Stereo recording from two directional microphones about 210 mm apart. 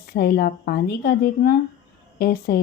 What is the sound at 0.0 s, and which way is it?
Speech, 45° left (ahead or behind).